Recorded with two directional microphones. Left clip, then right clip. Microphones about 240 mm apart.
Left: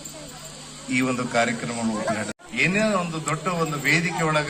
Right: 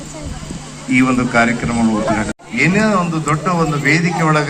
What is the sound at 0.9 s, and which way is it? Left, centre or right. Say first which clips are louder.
A man's voice: right 9 dB; left.